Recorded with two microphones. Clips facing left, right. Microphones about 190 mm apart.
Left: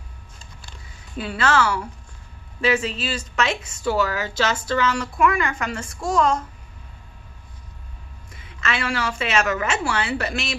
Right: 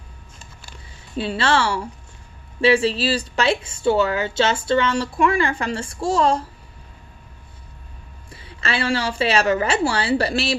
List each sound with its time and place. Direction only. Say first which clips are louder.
1.1 s a woman's voice: right 1 dB; 30° right (ahead or behind)
8.3 s a woman's voice: right 1 dB; 35° right (ahead or behind)